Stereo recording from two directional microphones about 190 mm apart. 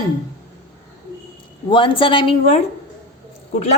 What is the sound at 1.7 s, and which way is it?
Speech, 25° left (ahead or behind).